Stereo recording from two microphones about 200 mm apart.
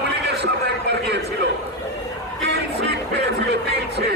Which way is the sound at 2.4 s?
60° right (ahead or behind).